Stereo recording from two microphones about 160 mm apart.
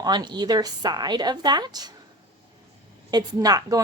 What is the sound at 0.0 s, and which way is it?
A woman's voice, 25° right (ahead or behind).